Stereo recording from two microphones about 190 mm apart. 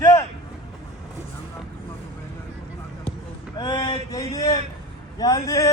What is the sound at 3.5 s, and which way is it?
A man's voice, 25° left (ahead or behind).